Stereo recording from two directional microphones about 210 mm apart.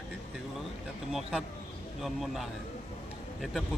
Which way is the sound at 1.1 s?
Centre (ahead or behind).